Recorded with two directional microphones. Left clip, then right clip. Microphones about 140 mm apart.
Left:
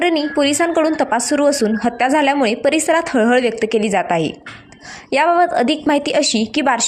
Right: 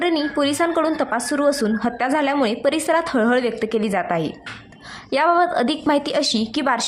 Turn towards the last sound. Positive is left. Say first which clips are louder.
# left 4 dB
turn(degrees=15)  # may be behind; listen again after turning